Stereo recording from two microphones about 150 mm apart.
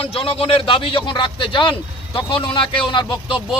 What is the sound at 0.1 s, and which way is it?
A man's voice, 40° left (ahead or behind).